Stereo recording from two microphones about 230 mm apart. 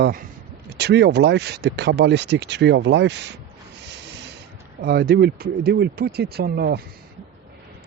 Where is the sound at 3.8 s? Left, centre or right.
Right.